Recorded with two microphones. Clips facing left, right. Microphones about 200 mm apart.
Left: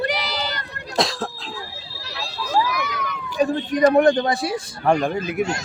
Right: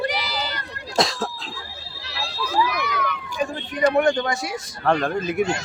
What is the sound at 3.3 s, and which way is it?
Speech, 40° left (ahead or behind).